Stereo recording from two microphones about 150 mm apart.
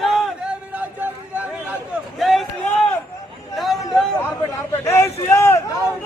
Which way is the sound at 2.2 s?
Centre (ahead or behind).